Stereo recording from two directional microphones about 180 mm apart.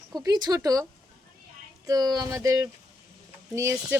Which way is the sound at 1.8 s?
20° right (ahead or behind).